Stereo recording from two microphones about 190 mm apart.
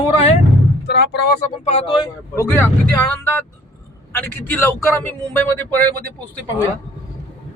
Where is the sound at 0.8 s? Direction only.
60° left (ahead or behind).